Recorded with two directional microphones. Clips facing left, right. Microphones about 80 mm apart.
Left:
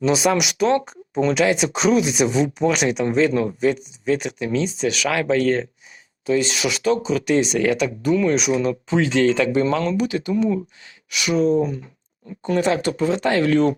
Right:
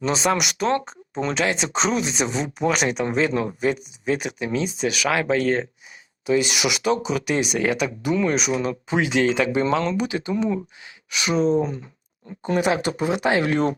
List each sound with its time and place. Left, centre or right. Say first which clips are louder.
0.0 s speech: left 3 dB; centre; by 11.8 s right
12.5 s speech: left 2 dB; centre